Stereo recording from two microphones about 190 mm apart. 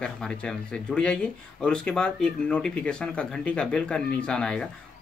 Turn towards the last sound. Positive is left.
turn(degrees=5)  # may be behind; listen again after turning